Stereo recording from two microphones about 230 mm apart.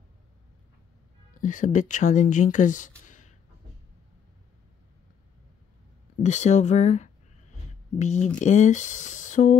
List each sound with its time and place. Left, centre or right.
1.4 s speech: left
3.1 s a sound: left
6.2 s speech: left